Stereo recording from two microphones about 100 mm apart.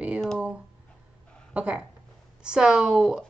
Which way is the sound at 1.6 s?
10° right (ahead or behind).